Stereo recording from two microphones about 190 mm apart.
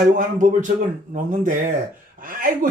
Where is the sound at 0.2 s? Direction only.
45° right (ahead or behind).